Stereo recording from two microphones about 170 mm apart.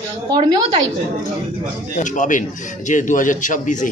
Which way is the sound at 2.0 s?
50° left (ahead or behind).